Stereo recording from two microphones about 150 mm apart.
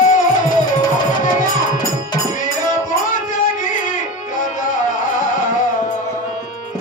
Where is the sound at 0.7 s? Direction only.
60° left (ahead or behind).